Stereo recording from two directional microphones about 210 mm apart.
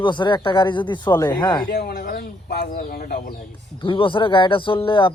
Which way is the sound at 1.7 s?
50° left (ahead or behind).